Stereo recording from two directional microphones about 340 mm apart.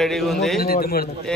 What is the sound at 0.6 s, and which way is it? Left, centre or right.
Speech, left.